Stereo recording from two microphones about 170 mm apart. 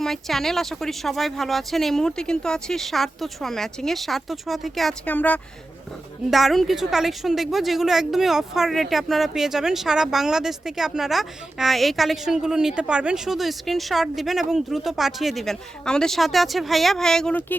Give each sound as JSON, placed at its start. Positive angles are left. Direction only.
{"t": 0.0, "sound": "a woman's voice", "side_deg": 0}